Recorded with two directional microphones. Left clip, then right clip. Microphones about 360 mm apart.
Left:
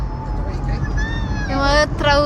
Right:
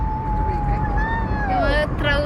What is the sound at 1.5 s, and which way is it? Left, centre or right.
Speech, centre.